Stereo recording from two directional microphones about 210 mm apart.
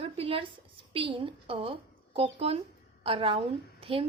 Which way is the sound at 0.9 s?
25° right (ahead or behind).